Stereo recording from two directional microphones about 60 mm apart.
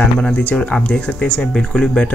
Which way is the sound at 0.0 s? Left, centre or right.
Left.